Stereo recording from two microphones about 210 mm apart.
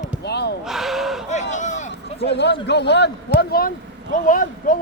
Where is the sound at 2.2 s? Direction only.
55° left (ahead or behind).